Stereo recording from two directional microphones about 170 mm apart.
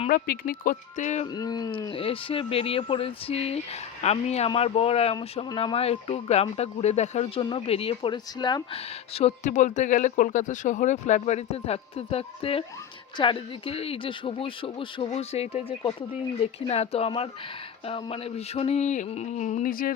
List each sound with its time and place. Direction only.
0.1 s speech: 55° left (ahead or behind)
1.3 s speech: 25° left (ahead or behind); by 15.6 s 40° left (ahead or behind)
15.8 s speech: 20° left (ahead or behind)
16.4 s speech: 35° left (ahead or behind); by 19.9 s 55° left (ahead or behind)